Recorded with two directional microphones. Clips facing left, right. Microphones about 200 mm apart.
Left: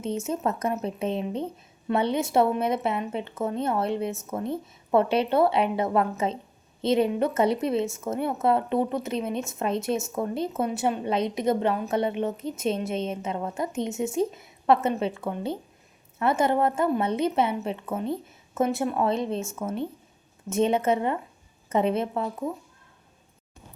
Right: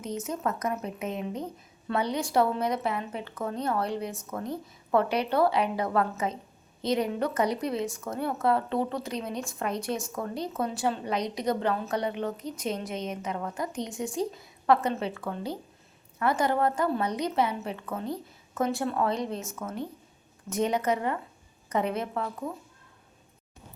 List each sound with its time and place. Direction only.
0.0 s speech: 25° left (ahead or behind)